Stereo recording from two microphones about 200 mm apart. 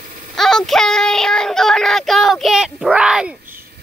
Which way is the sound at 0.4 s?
Centre (ahead or behind).